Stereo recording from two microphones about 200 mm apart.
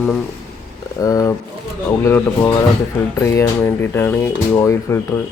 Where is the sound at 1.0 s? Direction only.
15° left (ahead or behind).